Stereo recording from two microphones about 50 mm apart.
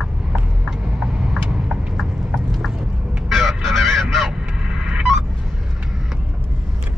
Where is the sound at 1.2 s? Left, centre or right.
Centre.